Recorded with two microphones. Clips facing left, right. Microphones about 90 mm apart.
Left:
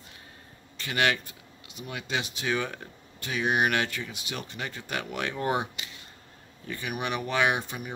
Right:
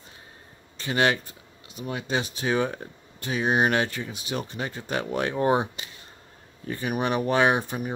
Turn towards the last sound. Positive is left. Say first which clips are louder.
# right 4 dB
turn(degrees=-35)  # may be behind; listen again after turning